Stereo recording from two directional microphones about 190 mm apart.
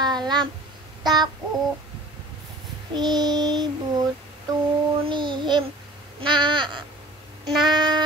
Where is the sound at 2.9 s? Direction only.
20° right (ahead or behind).